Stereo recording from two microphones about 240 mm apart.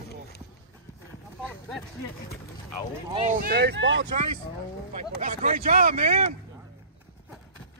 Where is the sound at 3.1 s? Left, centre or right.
Right.